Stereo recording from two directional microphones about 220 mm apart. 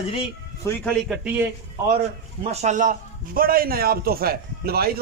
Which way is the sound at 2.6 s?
35° right (ahead or behind).